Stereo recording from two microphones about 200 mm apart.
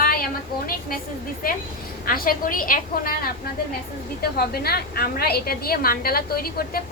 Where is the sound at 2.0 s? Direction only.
45° left (ahead or behind).